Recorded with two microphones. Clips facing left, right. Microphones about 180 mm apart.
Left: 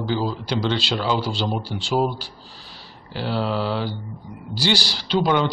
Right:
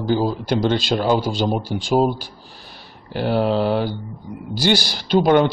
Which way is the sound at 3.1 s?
50° right (ahead or behind).